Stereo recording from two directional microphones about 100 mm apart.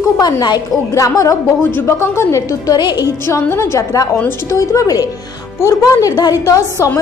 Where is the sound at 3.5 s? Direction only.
25° left (ahead or behind).